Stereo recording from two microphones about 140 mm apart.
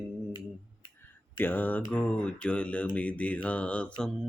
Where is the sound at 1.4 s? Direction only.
15° left (ahead or behind).